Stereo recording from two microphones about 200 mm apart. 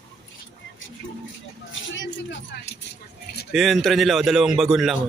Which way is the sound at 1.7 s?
65° left (ahead or behind).